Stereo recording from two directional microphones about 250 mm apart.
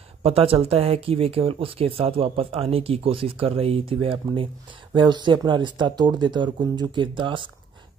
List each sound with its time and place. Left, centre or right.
0.2 s speech: right